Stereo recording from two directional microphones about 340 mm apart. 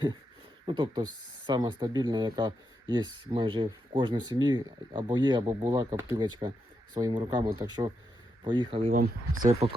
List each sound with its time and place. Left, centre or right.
0.6 s speech: centre